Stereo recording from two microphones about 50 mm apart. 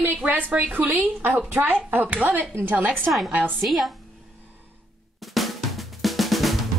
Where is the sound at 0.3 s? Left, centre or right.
Right.